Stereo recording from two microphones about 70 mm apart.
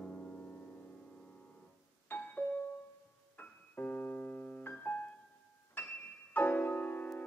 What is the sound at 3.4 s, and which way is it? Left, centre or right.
Keyboard, left.